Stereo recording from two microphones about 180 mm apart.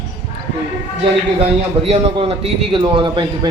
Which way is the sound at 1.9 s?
35° right (ahead or behind).